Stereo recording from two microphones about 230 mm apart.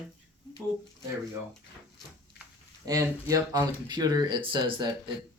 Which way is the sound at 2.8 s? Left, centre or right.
Centre.